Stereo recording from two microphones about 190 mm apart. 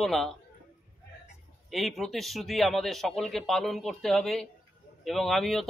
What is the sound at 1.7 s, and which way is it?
Speech, centre (ahead or behind).